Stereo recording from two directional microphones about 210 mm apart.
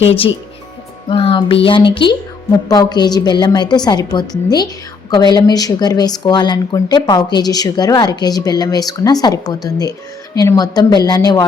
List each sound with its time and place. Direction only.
0.0 s a woman's voice: 25° left (ahead or behind)